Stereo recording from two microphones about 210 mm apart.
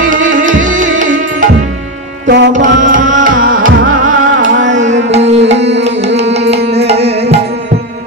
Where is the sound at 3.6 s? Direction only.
70° right (ahead or behind).